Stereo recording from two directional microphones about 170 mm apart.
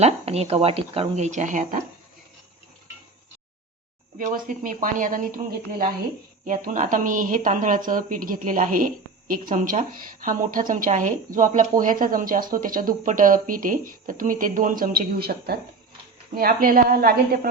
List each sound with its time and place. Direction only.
0.0 s speech: 40° right (ahead or behind)
4.2 s a woman's voice: 50° right (ahead or behind)